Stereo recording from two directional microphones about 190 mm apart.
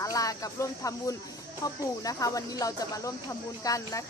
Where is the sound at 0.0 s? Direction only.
20° left (ahead or behind).